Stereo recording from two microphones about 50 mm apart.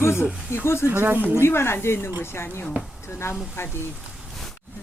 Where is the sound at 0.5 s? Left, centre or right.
Left.